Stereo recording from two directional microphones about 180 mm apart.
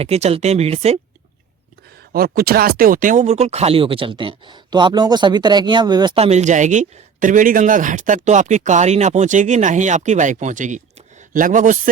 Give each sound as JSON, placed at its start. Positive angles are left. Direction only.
{"t": 0.0, "sound": "speech", "side_deg": -35}
{"t": 2.1, "sound": "speech", "side_deg": -55}
{"t": 6.1, "sound": "speech", "side_deg": -35}